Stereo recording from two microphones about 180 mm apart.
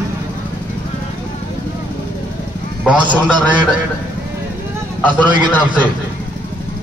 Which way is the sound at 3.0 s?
25° right (ahead or behind).